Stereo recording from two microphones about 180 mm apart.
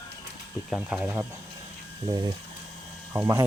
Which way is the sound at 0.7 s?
5° right (ahead or behind).